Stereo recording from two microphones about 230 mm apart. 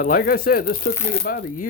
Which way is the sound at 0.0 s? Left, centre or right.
Left.